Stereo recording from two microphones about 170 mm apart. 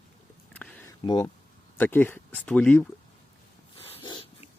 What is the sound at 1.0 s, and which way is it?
Speech, 25° left (ahead or behind).